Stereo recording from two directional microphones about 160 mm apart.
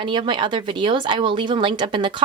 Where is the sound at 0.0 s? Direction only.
30° right (ahead or behind).